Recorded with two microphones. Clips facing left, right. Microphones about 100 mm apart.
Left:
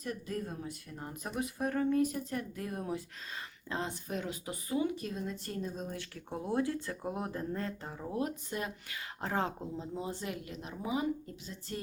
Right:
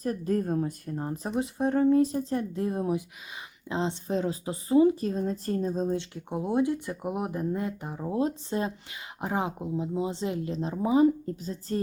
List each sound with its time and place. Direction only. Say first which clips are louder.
0.0 s a woman's voice: right 10 dB; 40° right (ahead or behind)
0.9 s speech: right 10 dB; 35° right (ahead or behind)
9.2 s speech: right 4 dB; 15° right (ahead or behind); by 11.8 s 40° right (ahead or behind)